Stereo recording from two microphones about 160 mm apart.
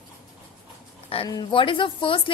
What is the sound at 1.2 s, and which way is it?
Speech, 25° left (ahead or behind).